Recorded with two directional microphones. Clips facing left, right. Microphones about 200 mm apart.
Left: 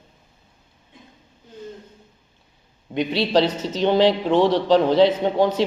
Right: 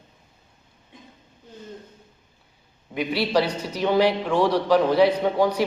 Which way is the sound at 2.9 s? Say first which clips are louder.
Left 3 dB; 20° left (ahead or behind).